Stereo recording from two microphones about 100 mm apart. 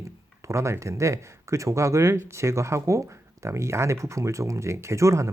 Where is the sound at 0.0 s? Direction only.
30° right (ahead or behind).